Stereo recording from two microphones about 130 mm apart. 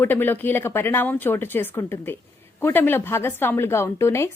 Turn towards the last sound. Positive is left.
turn(degrees=20)  # may be behind; listen again after turning